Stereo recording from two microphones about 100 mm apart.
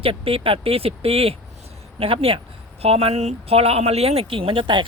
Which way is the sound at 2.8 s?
90° right.